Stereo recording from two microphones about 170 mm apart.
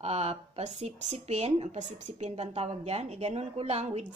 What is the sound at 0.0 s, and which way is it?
A woman's voice, 40° right (ahead or behind).